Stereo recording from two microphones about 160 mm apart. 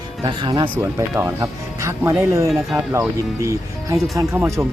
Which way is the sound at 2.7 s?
15° right (ahead or behind).